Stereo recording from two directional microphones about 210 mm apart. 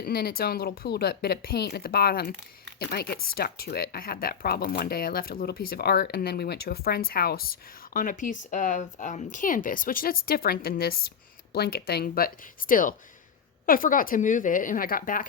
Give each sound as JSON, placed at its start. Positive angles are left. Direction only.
{"t": 0.0, "sound": "a woman's voice", "side_deg": 45}